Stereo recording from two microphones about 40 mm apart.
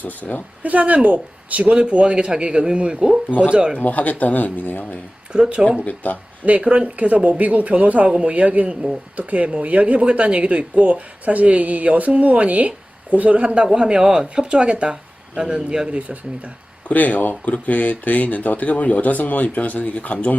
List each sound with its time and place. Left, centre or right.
0.0 s speech: left
0.6 s speech: right
1.7 s speech: right
3.8 s speech: left
5.3 s speech: right
5.8 s speech: left
6.4 s speech: right
6.7 s speech: right
13.7 s speech: right
15.9 s speech: right
16.9 s speech: left